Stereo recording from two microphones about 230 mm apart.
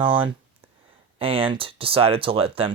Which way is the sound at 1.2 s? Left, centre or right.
Right.